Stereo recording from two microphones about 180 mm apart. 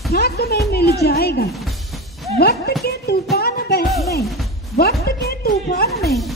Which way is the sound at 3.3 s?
60° left (ahead or behind).